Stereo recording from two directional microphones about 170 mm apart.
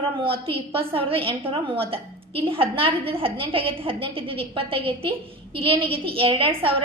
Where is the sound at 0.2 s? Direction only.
30° right (ahead or behind).